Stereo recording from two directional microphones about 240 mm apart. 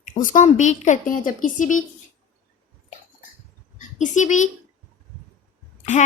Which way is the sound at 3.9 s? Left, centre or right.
Left.